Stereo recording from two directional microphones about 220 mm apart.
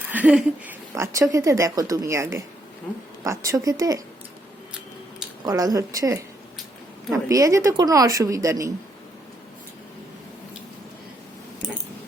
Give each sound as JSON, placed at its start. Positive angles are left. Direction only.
{"t": 0.1, "sound": "a woman's voice", "side_deg": -5}
{"t": 5.5, "sound": "a woman's voice", "side_deg": -15}
{"t": 7.3, "sound": "a woman's voice", "side_deg": -15}